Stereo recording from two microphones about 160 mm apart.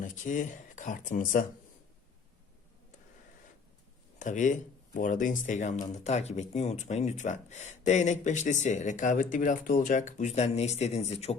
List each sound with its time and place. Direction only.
0.0 s speech: 50° left (ahead or behind)
4.2 s speech: 50° left (ahead or behind)